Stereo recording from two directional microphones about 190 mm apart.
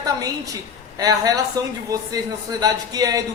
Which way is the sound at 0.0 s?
20° right (ahead or behind).